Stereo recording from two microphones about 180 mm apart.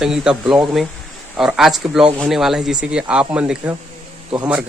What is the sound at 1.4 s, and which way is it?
Speech, centre (ahead or behind).